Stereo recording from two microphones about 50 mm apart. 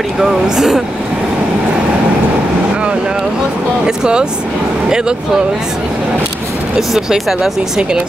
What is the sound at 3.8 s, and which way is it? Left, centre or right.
A woman's voice, centre.